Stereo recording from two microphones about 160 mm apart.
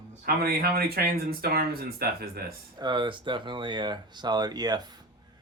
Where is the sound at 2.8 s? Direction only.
30° right (ahead or behind).